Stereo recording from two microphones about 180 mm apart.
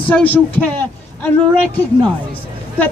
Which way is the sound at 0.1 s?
10° left (ahead or behind).